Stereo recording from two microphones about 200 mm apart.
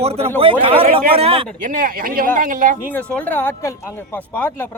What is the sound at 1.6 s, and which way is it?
Speech, 40° right (ahead or behind).